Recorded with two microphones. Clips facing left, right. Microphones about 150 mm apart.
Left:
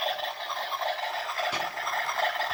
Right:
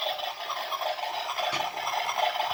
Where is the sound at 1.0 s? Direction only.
15° right (ahead or behind).